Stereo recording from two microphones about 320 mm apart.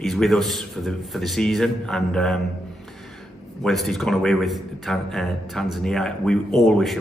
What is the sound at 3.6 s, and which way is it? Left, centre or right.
A man's voice, centre.